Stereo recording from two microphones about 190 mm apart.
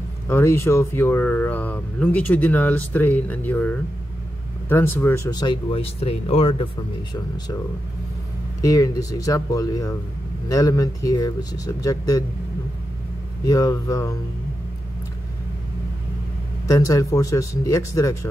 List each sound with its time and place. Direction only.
0.3 s speech: 15° left (ahead or behind); by 6.7 s 30° left (ahead or behind)
8.5 s speech: 15° left (ahead or behind)
13.5 s speech: 20° left (ahead or behind)
16.6 s speech: 15° left (ahead or behind)